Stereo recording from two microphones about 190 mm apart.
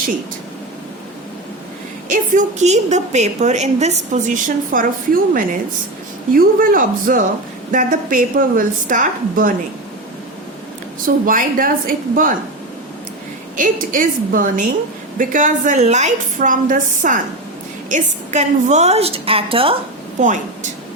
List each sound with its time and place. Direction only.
2.0 s a woman's voice: 40° right (ahead or behind)
11.3 s a woman's voice: 45° right (ahead or behind)
13.6 s a woman's voice: 45° right (ahead or behind); by 19.7 s 30° right (ahead or behind)
20.2 s a woman's voice: 40° right (ahead or behind)